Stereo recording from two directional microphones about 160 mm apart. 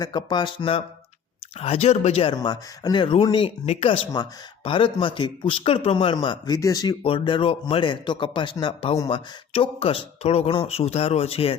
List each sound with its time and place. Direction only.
0.0 s speech: 30° left (ahead or behind)
2.3 s speech: 25° left (ahead or behind)
7.0 s speech: 35° left (ahead or behind)